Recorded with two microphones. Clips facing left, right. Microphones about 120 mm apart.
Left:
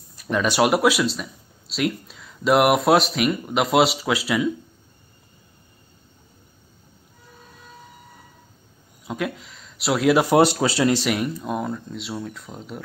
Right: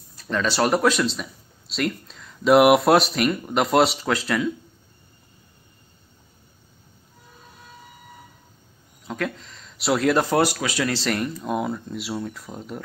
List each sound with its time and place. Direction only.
0.2 s speech: 15° left (ahead or behind)
9.0 s speech: 10° left (ahead or behind)
10.4 s speech: 30° left (ahead or behind)
10.9 s speech: 10° left (ahead or behind)